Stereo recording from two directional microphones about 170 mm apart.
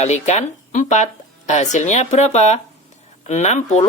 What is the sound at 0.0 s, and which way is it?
Speech, 40° left (ahead or behind).